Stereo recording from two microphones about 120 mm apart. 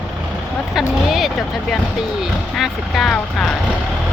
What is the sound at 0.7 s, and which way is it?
Speech, centre (ahead or behind).